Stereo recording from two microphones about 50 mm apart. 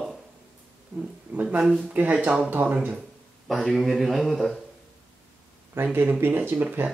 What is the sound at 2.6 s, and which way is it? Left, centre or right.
Speech, right.